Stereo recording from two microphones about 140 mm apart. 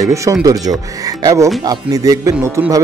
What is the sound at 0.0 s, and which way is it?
Speech, 25° right (ahead or behind).